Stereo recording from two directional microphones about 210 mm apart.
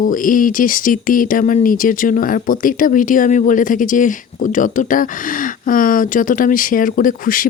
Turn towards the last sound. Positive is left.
turn(degrees=40)  # may be behind; listen again after turning